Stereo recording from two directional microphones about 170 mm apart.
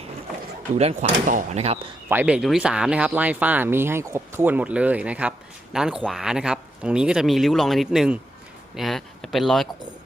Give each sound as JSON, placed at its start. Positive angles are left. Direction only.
{"t": 0.8, "sound": "speech", "side_deg": -40}
{"t": 2.0, "sound": "speech", "side_deg": -10}